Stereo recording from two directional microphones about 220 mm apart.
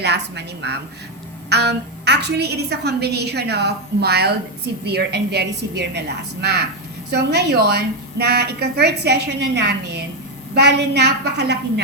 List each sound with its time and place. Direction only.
0.0 s a woman's voice: 50° right (ahead or behind)